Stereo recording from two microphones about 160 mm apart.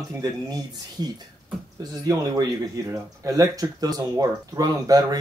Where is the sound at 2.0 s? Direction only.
20° right (ahead or behind).